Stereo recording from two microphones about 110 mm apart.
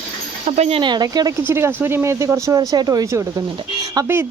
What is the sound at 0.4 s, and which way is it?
Speech, 75° right (ahead or behind).